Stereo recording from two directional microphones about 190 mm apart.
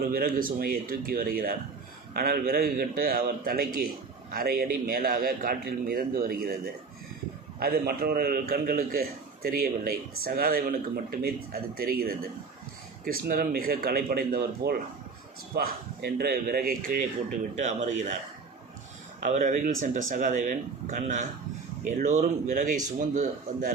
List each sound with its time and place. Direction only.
0.0 s a man's voice: 50° right (ahead or behind)
7.6 s a man's voice: 55° right (ahead or behind)
17.5 s speech: 40° right (ahead or behind)
19.2 s a man's voice: 40° right (ahead or behind)